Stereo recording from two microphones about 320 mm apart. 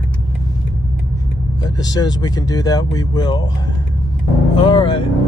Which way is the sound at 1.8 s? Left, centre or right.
Centre.